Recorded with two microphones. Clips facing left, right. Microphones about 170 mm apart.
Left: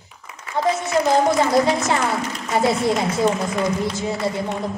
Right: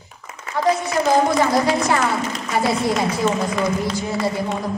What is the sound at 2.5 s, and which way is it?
Speech, 25° left (ahead or behind).